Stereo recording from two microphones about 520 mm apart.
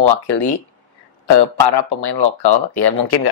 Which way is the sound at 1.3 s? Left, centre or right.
Left.